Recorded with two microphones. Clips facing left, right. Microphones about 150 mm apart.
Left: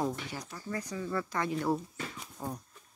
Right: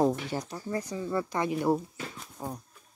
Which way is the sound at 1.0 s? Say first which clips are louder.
Right 3 dB; 15° right (ahead or behind).